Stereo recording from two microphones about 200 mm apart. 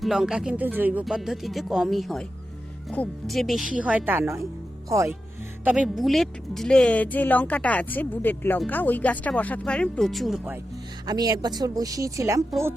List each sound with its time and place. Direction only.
0.0 s speech: 5° right (ahead or behind)
5.6 s speech: 5° right (ahead or behind)
11.0 s speech: 20° right (ahead or behind)